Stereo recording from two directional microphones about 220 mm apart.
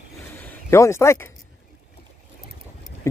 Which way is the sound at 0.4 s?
10° left (ahead or behind).